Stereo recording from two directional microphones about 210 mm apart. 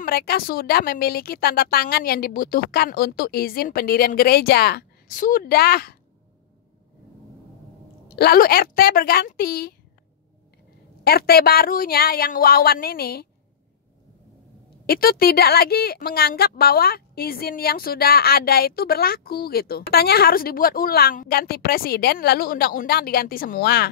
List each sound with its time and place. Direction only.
0.0 s a woman's voice: 45° left (ahead or behind)
8.2 s a woman's voice: 45° left (ahead or behind)
11.1 s a woman's voice: 45° left (ahead or behind)
14.9 s a woman's voice: 45° left (ahead or behind)